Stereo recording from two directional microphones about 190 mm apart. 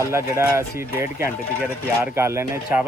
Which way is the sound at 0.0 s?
15° right (ahead or behind).